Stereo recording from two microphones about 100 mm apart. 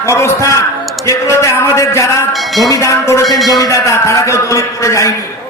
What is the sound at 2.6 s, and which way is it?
A man's voice, 35° left (ahead or behind).